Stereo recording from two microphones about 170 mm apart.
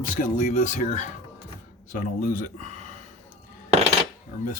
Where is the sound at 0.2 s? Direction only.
50° left (ahead or behind).